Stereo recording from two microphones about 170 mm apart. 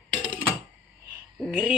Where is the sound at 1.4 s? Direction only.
10° right (ahead or behind).